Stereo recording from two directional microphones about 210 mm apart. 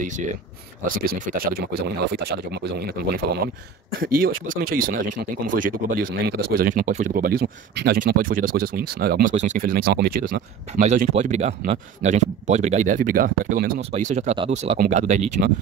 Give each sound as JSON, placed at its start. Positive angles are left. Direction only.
{"t": 0.0, "sound": "speech", "side_deg": -35}
{"t": 4.0, "sound": "speech", "side_deg": -45}
{"t": 9.3, "sound": "speech", "side_deg": -35}
{"t": 10.7, "sound": "speech", "side_deg": -35}